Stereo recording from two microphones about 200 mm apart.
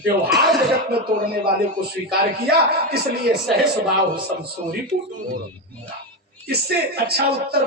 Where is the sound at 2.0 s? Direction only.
50° right (ahead or behind).